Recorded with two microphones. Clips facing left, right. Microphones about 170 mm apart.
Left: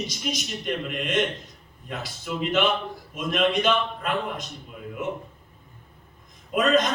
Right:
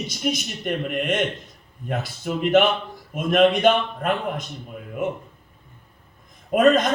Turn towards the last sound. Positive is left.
turn(degrees=-50)  # may be behind; listen again after turning